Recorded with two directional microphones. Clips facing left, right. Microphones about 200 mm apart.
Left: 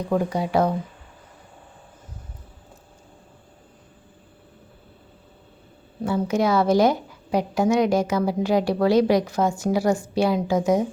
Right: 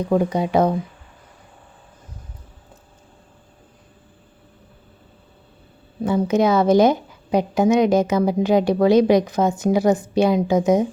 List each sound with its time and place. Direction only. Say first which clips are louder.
0.1 s a woman's voice: right 3 dB; 20° right (ahead or behind)
6.1 s a woman's voice: right 4 dB; 20° right (ahead or behind)